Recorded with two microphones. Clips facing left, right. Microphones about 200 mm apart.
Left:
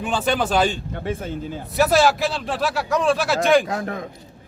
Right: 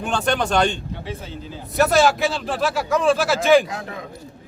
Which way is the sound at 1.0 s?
50° left (ahead or behind).